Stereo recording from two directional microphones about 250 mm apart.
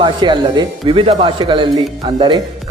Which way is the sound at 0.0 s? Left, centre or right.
Centre.